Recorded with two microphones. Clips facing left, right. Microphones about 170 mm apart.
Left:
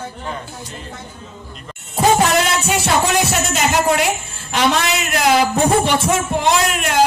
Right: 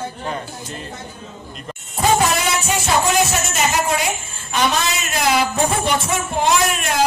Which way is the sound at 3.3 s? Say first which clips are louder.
Left 2 dB; 70° left (ahead or behind).